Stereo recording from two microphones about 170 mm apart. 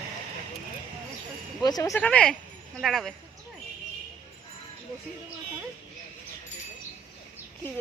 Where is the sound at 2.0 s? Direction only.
5° left (ahead or behind).